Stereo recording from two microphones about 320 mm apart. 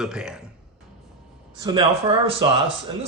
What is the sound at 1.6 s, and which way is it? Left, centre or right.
Speech, centre.